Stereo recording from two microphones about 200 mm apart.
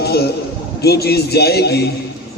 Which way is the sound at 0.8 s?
55° left (ahead or behind).